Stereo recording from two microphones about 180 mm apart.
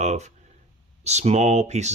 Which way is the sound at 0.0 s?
40° right (ahead or behind).